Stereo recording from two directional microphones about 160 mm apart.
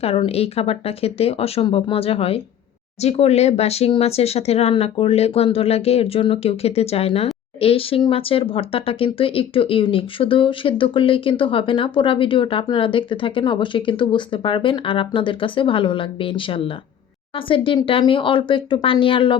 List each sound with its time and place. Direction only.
0.0 s speech: 35° left (ahead or behind)